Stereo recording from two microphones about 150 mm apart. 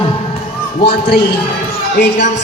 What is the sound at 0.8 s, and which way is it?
Speech, 90° left.